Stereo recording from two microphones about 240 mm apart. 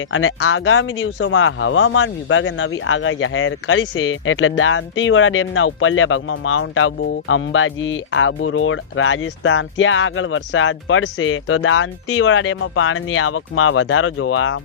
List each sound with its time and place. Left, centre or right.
0.1 s speech: left